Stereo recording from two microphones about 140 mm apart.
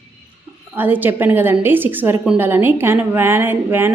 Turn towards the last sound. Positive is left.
turn(degrees=-15)  # may be behind; listen again after turning